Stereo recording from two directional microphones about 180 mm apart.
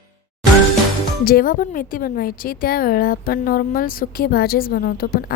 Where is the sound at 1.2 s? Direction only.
55° left (ahead or behind).